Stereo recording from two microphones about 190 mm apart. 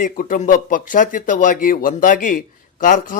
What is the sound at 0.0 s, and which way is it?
A man's voice, 45° left (ahead or behind).